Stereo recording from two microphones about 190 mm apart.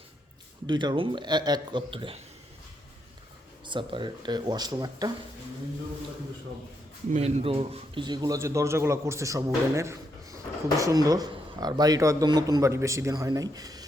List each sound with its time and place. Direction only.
0.7 s a man's voice: 25° right (ahead or behind)
3.7 s a man's voice: 25° right (ahead or behind)
7.1 s a man's voice: 35° right (ahead or behind); by 13.8 s 20° right (ahead or behind)